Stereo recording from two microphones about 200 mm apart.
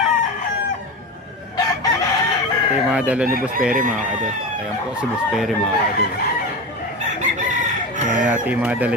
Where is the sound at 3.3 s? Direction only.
45° right (ahead or behind).